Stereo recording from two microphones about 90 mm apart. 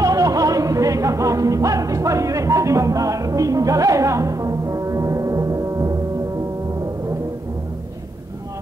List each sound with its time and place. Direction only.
0.0 s music: 40° right (ahead or behind)